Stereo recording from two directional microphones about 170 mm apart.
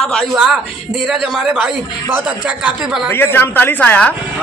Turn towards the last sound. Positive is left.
turn(degrees=10)  # may be behind; listen again after turning